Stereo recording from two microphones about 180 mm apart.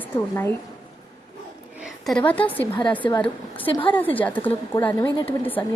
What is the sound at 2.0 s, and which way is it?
A woman's voice, 5° left (ahead or behind).